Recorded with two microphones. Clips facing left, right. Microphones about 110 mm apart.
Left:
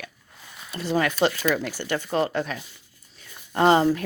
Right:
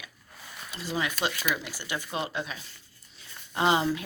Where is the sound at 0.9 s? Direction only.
55° left (ahead or behind).